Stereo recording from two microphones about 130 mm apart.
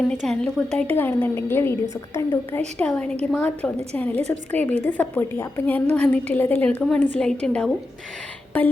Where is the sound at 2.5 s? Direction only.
10° left (ahead or behind).